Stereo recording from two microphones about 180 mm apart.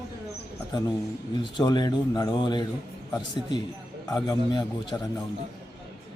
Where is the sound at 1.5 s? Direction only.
25° left (ahead or behind).